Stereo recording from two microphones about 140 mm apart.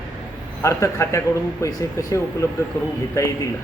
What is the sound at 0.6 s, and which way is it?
A man's voice, 20° left (ahead or behind).